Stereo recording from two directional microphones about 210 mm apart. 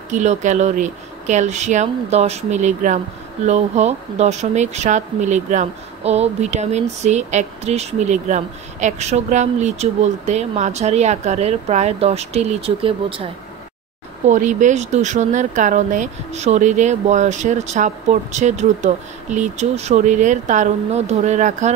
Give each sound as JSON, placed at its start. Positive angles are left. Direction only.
{"t": 0.1, "sound": "speech", "side_deg": -35}
{"t": 14.2, "sound": "speech", "side_deg": -35}